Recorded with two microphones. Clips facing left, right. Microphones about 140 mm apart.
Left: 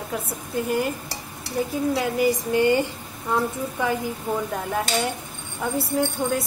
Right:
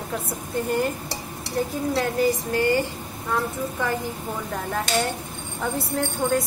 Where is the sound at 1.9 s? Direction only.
15° left (ahead or behind).